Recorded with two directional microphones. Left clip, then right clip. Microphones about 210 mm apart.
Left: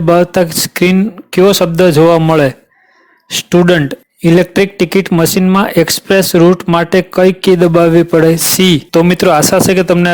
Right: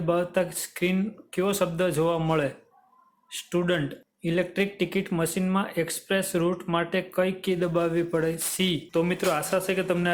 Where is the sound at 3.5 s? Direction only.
45° left (ahead or behind).